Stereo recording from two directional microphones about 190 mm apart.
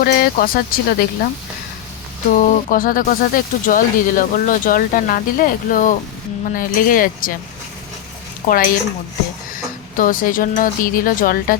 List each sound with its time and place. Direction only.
0.0 s speech: 50° left (ahead or behind)
2.3 s speech: 45° left (ahead or behind)
8.4 s speech: 45° left (ahead or behind)
10.0 s speech: 45° left (ahead or behind)